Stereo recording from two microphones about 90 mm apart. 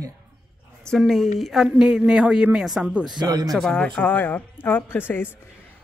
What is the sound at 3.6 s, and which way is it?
Speech, 10° left (ahead or behind).